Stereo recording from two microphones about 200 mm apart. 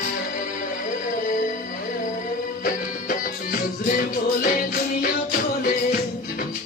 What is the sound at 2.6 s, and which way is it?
Music, 45° left (ahead or behind).